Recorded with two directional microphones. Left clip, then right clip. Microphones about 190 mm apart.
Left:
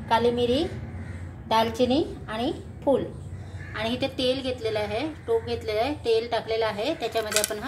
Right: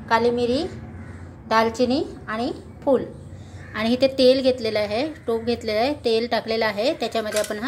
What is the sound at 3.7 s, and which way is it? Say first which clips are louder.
A woman's voice: right 8 dB; 25° right (ahead or behind).